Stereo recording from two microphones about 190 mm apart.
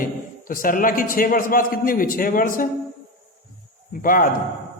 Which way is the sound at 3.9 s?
45° left (ahead or behind).